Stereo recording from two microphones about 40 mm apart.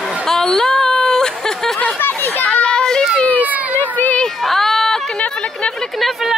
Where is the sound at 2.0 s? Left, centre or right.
Left.